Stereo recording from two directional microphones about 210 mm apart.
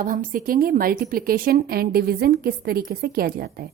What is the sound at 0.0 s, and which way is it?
A woman's voice, 40° right (ahead or behind).